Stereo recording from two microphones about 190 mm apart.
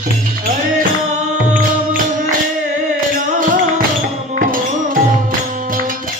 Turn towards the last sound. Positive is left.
turn(degrees=-45)  # may be behind; listen again after turning